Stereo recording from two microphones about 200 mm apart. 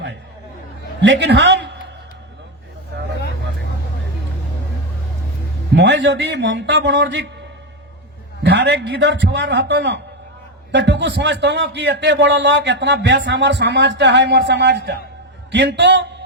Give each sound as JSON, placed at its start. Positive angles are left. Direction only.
{"t": 1.0, "sound": "a man's voice", "side_deg": -60}
{"t": 5.7, "sound": "a man's voice", "side_deg": -60}
{"t": 8.4, "sound": "a man's voice", "side_deg": -60}